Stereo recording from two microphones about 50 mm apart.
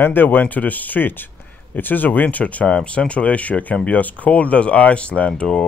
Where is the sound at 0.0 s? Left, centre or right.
Left.